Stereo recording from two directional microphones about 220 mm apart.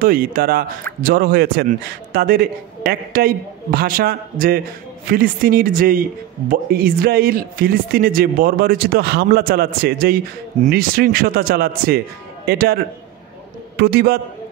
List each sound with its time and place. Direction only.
0.0 s a man's voice: 40° right (ahead or behind)
13.7 s speech: 45° right (ahead or behind)